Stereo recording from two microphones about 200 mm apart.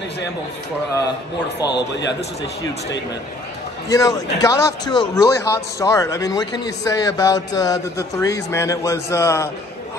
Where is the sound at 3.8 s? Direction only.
15° left (ahead or behind).